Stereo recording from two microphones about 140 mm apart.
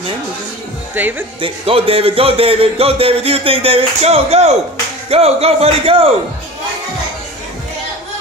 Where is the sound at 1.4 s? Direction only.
40° right (ahead or behind).